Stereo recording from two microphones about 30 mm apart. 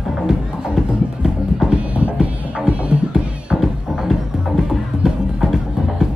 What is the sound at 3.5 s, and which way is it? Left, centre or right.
Music, centre.